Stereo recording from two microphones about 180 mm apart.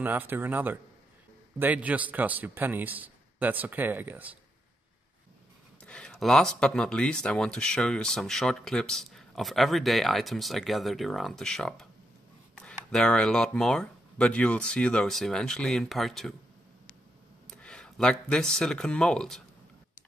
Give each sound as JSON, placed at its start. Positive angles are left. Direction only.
{"t": 0.0, "sound": "a man's voice", "side_deg": -10}
{"t": 5.8, "sound": "speech", "side_deg": 5}
{"t": 17.5, "sound": "speech", "side_deg": 5}